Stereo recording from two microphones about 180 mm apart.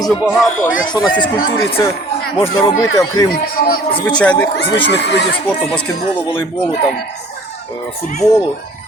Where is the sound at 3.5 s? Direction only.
55° left (ahead or behind).